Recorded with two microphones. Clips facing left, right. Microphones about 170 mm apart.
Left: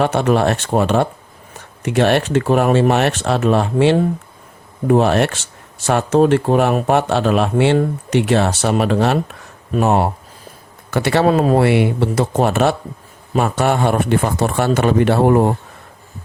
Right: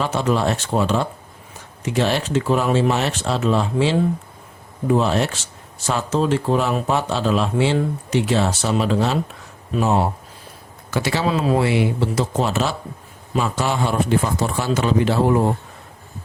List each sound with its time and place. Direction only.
0.0 s speech: 65° left (ahead or behind)